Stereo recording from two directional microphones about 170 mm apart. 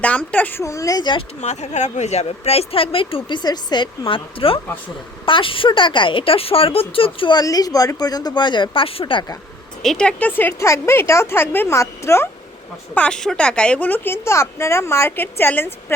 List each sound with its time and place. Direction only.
0.0 s a woman's voice: 10° left (ahead or behind); by 1.2 s 25° left (ahead or behind)
1.4 s a woman's voice: 40° left (ahead or behind)
9.8 s a woman's voice: 5° left (ahead or behind)